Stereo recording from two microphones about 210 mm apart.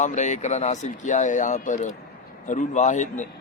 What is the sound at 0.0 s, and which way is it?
Speech, 35° left (ahead or behind).